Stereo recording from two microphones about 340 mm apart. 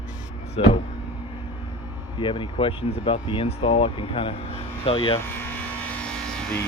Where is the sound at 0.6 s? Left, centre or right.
Centre.